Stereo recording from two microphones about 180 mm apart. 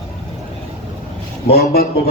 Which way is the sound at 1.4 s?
60° left (ahead or behind).